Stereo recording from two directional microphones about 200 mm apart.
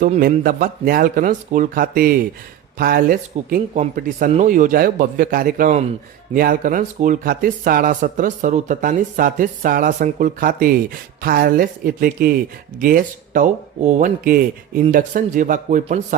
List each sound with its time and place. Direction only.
0.2 s speech: 45° right (ahead or behind)